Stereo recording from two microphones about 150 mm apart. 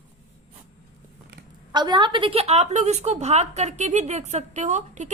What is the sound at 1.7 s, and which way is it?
A woman's voice, 30° right (ahead or behind).